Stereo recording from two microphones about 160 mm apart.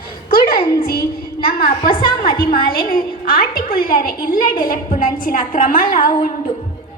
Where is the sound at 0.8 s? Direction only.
70° left (ahead or behind).